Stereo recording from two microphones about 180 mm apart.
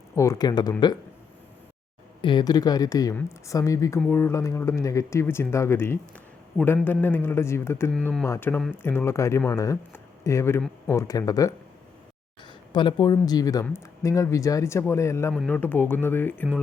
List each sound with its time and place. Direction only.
0.2 s speech: 20° left (ahead or behind)
2.2 s speech: 25° left (ahead or behind)
12.7 s speech: 25° left (ahead or behind)